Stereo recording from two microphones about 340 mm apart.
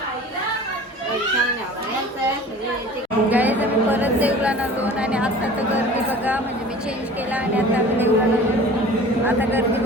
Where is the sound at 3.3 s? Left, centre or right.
Centre.